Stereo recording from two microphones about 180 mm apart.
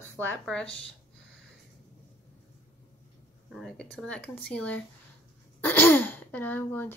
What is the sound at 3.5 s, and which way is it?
Speech, centre (ahead or behind).